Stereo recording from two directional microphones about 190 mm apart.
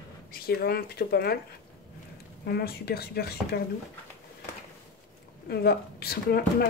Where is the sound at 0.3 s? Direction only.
55° left (ahead or behind).